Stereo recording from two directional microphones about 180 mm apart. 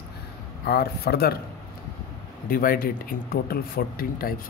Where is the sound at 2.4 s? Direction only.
55° left (ahead or behind).